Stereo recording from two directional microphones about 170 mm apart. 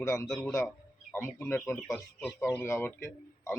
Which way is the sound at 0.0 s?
15° left (ahead or behind).